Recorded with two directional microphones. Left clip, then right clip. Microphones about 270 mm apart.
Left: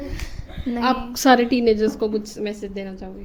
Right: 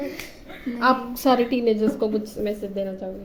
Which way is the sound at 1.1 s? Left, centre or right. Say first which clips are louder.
Left 4 dB; left.